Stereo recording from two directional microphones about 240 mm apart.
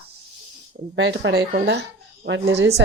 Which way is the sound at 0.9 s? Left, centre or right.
Right.